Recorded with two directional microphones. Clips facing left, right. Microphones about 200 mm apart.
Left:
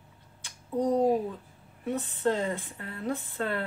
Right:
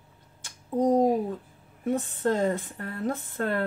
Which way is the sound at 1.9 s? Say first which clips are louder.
Right 2 dB; 45° right (ahead or behind).